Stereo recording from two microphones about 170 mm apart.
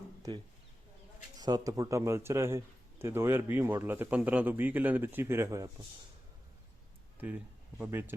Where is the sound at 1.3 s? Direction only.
25° right (ahead or behind).